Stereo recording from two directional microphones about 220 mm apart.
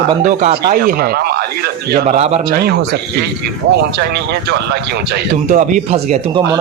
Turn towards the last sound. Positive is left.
turn(degrees=-35)  # may be behind; listen again after turning